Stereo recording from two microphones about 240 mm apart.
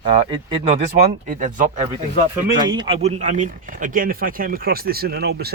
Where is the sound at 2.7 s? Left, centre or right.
Right.